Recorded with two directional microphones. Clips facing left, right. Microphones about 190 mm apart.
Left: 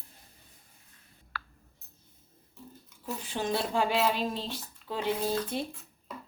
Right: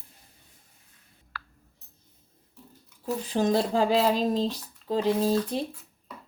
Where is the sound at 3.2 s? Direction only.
40° right (ahead or behind).